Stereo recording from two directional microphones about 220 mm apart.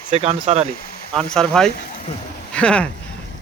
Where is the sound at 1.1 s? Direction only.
5° left (ahead or behind).